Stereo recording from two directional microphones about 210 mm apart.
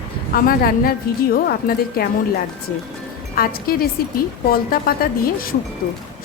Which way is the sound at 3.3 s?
45° left (ahead or behind).